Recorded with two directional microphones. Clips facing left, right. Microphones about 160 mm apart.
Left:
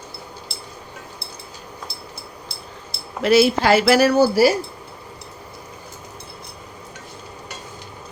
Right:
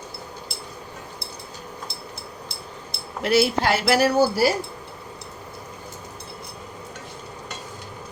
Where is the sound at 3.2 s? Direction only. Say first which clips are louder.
Left 5 dB; 90° left.